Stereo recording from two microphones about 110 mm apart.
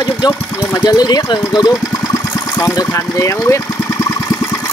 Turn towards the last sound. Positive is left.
turn(degrees=25)  # may be behind; listen again after turning